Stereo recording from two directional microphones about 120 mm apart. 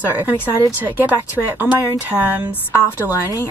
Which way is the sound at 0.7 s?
15° right (ahead or behind).